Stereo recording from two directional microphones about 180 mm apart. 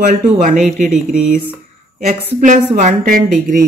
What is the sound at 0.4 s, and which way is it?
Speech, 45° right (ahead or behind).